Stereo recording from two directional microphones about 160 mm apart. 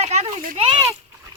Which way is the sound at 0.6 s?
35° right (ahead or behind).